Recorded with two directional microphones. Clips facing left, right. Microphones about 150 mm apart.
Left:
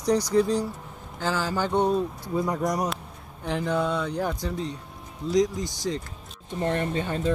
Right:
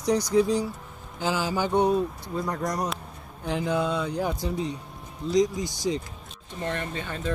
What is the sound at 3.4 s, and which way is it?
Speech, 5° right (ahead or behind).